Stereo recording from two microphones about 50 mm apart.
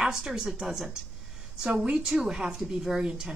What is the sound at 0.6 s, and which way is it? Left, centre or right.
Speech, centre.